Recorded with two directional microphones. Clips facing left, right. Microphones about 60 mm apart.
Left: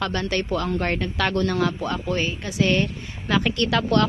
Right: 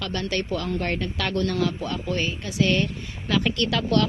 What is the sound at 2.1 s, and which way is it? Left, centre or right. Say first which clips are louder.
A woman's voice: left 2 dB; left.